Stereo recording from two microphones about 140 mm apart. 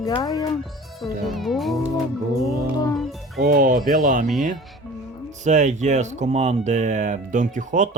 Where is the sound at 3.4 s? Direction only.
85° right.